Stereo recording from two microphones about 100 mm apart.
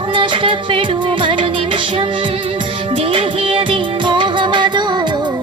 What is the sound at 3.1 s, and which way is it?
Music, 65° right (ahead or behind).